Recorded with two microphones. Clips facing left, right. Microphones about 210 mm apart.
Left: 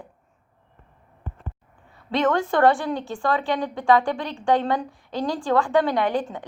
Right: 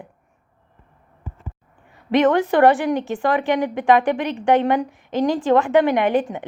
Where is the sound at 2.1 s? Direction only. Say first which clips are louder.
Right 5 dB; 20° right (ahead or behind).